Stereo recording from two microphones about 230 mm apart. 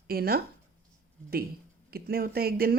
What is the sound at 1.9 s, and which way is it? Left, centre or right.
Speech, right.